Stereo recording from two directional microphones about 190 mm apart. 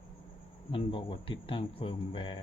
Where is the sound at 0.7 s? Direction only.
25° left (ahead or behind).